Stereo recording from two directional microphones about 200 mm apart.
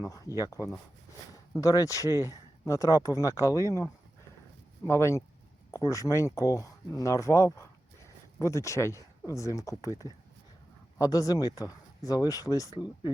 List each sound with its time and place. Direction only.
0.0 s speech: 15° left (ahead or behind)
4.9 s speech: 15° left (ahead or behind)